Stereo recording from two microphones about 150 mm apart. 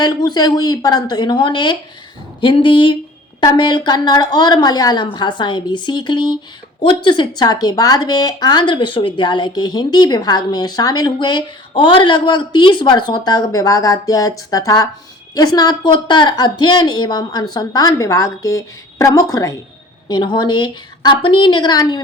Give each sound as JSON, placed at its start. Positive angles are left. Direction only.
{"t": 0.0, "sound": "a woman's voice", "side_deg": 25}